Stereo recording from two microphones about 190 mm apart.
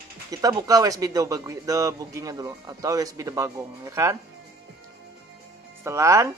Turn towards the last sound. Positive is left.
turn(degrees=-15)  # may be behind; listen again after turning